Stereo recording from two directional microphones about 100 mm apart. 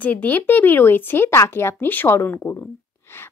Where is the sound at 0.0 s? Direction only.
15° left (ahead or behind).